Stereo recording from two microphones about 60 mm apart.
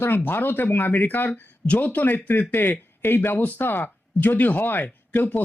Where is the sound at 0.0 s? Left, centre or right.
Left.